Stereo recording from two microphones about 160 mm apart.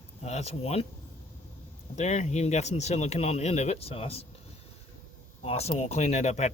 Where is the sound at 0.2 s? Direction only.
45° left (ahead or behind).